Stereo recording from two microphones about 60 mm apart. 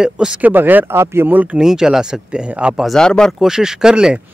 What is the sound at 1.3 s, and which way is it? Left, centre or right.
Speech, right.